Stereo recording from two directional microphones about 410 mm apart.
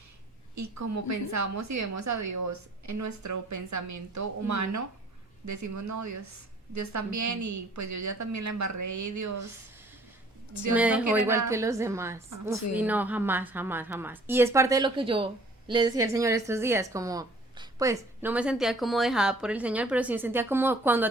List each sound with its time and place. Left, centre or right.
0.5 s a woman's voice: right
10.8 s a woman's voice: centre